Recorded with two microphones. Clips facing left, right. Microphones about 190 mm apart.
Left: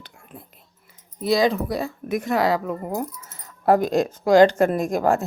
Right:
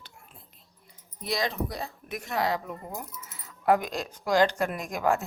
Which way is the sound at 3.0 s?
45° left (ahead or behind).